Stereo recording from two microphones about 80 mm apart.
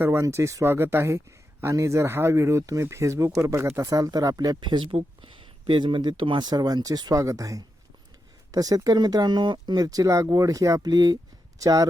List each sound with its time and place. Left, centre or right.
0.0 s speech: right
3.8 s speech: right
4.4 s speech: right